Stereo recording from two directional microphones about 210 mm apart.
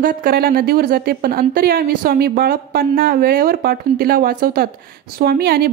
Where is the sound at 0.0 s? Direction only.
45° right (ahead or behind).